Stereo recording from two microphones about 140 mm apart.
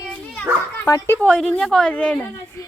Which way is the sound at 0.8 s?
20° left (ahead or behind).